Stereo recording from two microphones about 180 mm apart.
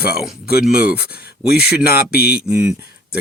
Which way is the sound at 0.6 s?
5° right (ahead or behind).